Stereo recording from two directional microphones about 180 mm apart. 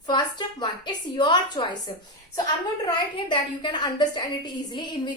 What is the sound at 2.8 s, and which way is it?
A woman's voice, 25° left (ahead or behind).